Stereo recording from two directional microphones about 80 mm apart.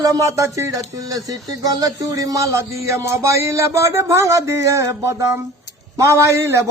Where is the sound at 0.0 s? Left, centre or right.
Right.